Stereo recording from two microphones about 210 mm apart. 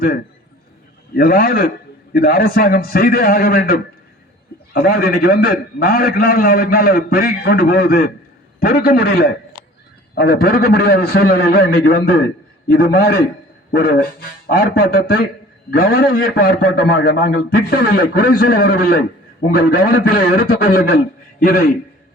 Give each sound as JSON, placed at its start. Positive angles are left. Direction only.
{"t": 1.1, "sound": "a man's voice", "side_deg": 45}